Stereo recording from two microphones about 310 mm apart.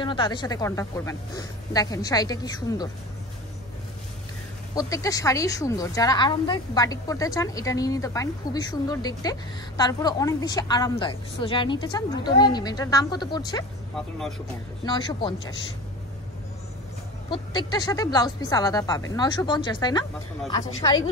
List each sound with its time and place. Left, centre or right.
0.0 s a woman's voice: centre
4.7 s a woman's voice: centre
14.9 s a woman's voice: centre
17.3 s a woman's voice: centre